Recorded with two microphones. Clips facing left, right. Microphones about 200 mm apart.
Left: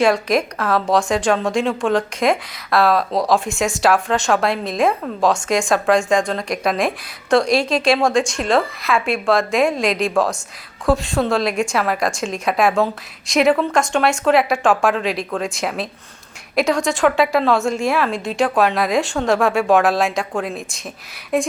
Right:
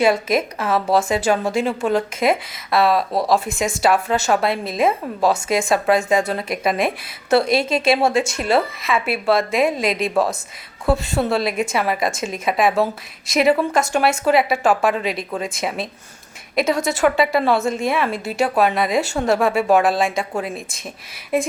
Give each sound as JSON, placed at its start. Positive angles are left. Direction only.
{"t": 0.0, "sound": "a woman's voice", "side_deg": -5}